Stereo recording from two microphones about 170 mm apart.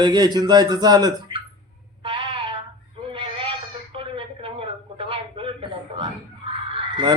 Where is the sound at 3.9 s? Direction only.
30° right (ahead or behind).